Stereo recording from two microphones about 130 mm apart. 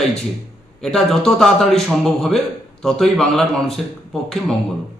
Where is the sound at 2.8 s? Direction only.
5° left (ahead or behind).